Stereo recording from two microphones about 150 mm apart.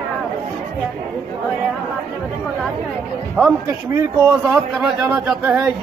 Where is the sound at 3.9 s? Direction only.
15° right (ahead or behind).